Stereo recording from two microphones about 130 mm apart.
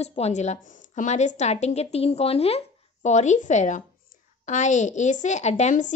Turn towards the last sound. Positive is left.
turn(degrees=65)  # may be behind; listen again after turning